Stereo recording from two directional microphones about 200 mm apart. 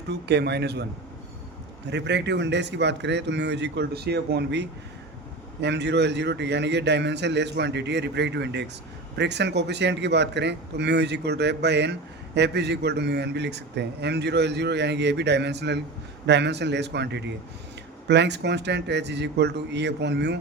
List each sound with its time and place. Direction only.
0.1 s a man's voice: 55° right (ahead or behind)
1.9 s a man's voice: 60° right (ahead or behind)